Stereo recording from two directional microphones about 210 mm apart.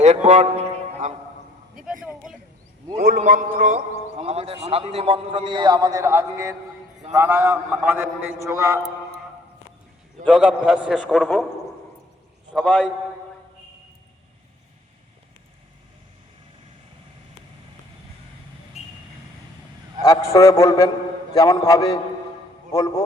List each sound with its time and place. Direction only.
0.0 s a sound: 35° right (ahead or behind)
2.0 s a sound: 5° right (ahead or behind)
2.9 s a man's voice: 45° right (ahead or behind)
4.2 s a man's voice: 30° right (ahead or behind); by 8.8 s 15° right (ahead or behind)
10.2 s a man's voice: 5° right (ahead or behind)
12.5 s a man's voice: 5° left (ahead or behind)
18.8 s vehicle: 30° left (ahead or behind)
20.0 s a man's voice: 15° left (ahead or behind)